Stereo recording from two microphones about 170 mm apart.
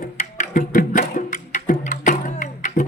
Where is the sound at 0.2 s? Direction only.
50° left (ahead or behind).